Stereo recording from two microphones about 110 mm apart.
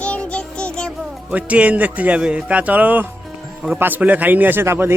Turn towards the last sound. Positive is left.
turn(degrees=-20)  # may be behind; listen again after turning